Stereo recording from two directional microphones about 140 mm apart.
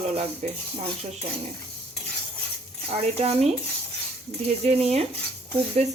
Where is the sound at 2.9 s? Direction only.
45° right (ahead or behind).